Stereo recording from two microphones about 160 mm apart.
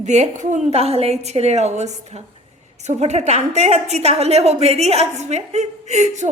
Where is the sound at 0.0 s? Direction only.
45° right (ahead or behind).